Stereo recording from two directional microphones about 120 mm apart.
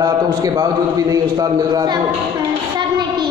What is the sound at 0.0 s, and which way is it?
A man's voice, 30° right (ahead or behind).